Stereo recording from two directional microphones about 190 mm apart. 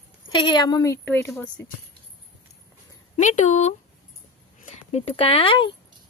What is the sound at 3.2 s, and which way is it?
Speech, 40° left (ahead or behind).